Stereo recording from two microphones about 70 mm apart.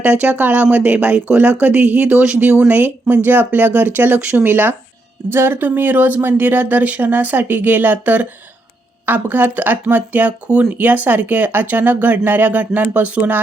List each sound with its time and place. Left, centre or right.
0.0 s speech: right
2.5 s speech: right